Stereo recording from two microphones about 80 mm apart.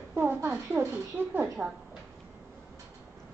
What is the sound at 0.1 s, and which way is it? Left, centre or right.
A woman's voice, right.